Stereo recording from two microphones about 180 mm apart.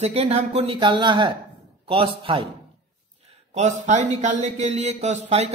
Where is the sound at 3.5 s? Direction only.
40° right (ahead or behind).